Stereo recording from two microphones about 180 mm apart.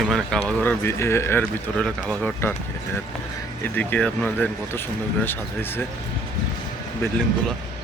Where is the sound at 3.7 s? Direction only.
5° left (ahead or behind).